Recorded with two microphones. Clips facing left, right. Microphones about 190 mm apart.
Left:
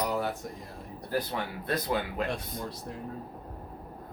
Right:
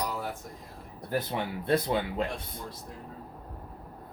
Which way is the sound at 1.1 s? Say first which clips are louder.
Right 1 dB; 25° right (ahead or behind).